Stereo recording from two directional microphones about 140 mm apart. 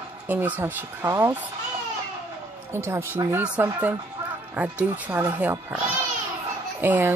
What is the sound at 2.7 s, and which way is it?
A woman's voice, 15° right (ahead or behind).